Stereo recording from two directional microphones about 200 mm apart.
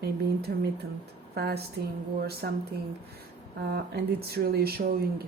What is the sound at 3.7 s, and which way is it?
Speech, 50° right (ahead or behind).